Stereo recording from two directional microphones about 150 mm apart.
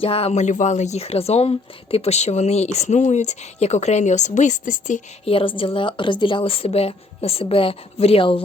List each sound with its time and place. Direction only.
0.0 s speech: 40° left (ahead or behind); by 5.0 s 60° left (ahead or behind)
5.2 s a woman's voice: 35° left (ahead or behind)